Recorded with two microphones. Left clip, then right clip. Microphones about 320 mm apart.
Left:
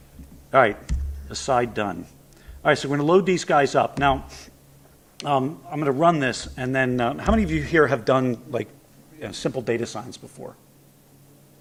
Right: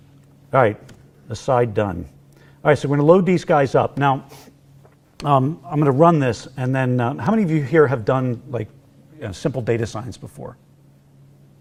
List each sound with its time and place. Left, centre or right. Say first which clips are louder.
0.5 s speech: right 1 dB; right
5.2 s speech: right 5 dB; right
6.0 s speech: right 4 dB; right